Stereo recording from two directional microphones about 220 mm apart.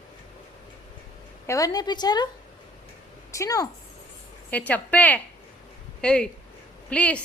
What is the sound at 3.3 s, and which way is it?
A woman's voice, 15° left (ahead or behind).